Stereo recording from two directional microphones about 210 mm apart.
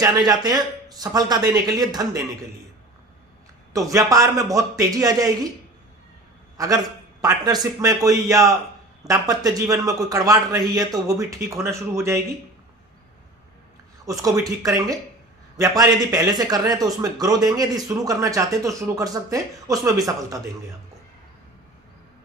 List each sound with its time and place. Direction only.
0.0 s speech: 20° right (ahead or behind)
3.7 s speech: 15° right (ahead or behind)
6.6 s speech: 15° right (ahead or behind)
14.0 s a man's voice: 15° right (ahead or behind)